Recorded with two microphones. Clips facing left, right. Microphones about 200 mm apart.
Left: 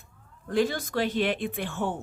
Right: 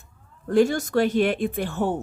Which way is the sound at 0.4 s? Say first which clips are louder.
Right 6 dB; 45° right (ahead or behind).